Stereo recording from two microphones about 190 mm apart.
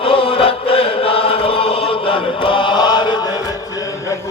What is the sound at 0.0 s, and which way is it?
Chant, 30° left (ahead or behind).